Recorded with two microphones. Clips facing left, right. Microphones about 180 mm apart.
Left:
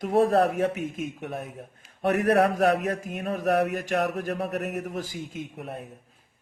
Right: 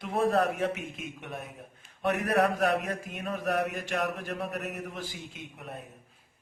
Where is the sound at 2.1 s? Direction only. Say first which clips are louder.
Left 5 dB; 45° left (ahead or behind).